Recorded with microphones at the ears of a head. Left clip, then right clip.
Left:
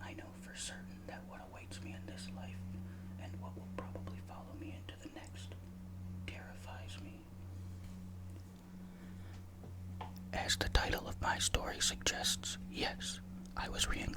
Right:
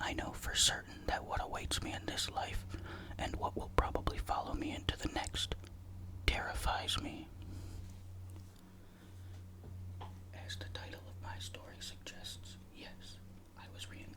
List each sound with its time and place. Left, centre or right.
0.0 s whispering: right
10.3 s speech: left